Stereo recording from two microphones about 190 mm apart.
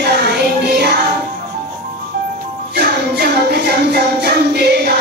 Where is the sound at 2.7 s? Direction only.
60° right (ahead or behind).